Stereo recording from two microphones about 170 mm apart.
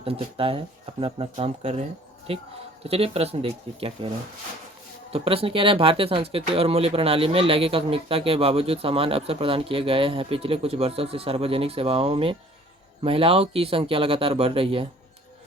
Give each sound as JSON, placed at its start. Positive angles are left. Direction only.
{"t": 0.0, "sound": "speech", "side_deg": -30}
{"t": 5.1, "sound": "speech", "side_deg": -35}